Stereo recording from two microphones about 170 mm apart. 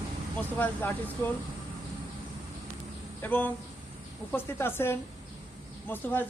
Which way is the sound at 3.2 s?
10° left (ahead or behind).